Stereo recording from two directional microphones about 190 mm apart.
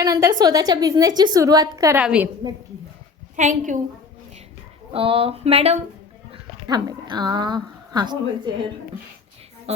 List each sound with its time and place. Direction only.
0.0 s a woman's voice: 20° right (ahead or behind)
2.0 s a woman's voice: 5° right (ahead or behind)
3.3 s speech: 40° right (ahead or behind)
4.9 s speech: 30° right (ahead or behind)
6.3 s a woman's voice: 20° right (ahead or behind)
9.7 s a woman's voice: 35° right (ahead or behind)